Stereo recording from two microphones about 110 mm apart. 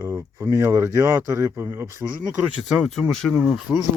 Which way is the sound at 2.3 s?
10° right (ahead or behind).